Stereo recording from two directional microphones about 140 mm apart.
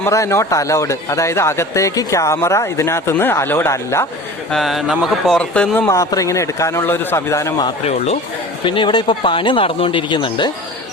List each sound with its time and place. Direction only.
0.0 s a man's voice: 20° left (ahead or behind)
4.5 s speech: centre (ahead or behind)
5.9 s a man's voice: 25° left (ahead or behind)
7.9 s speech: 50° left (ahead or behind)
8.6 s speech: 35° left (ahead or behind)